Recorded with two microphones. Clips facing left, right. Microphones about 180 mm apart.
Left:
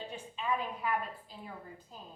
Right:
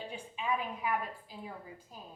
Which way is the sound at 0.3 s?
10° right (ahead or behind).